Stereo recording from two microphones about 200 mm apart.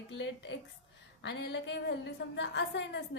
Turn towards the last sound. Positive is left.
turn(degrees=60)  # may be behind; listen again after turning